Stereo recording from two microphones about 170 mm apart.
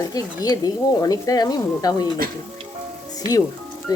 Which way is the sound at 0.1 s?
20° left (ahead or behind).